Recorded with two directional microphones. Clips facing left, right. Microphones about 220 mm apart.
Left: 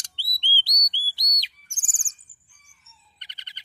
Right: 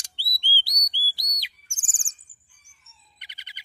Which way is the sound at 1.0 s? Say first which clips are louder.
Right 3 dB; 45° left (ahead or behind).